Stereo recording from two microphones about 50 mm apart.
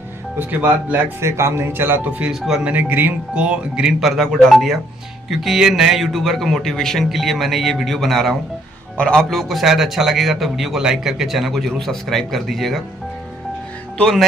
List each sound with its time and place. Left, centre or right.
0.4 s speech: right
1.2 s speech: right
2.0 s speech: right
2.6 s speech: right
3.3 s speech: centre
4.0 s a man's voice: centre
6.1 s a man's voice: centre
7.1 s a man's voice: centre
8.9 s a man's voice: centre
9.2 s a man's voice: centre